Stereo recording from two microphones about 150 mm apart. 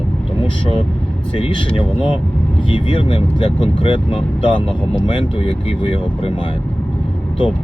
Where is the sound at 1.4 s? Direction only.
35° left (ahead or behind).